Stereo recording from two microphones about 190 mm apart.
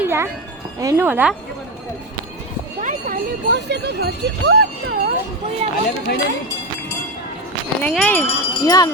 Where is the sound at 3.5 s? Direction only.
60° right (ahead or behind).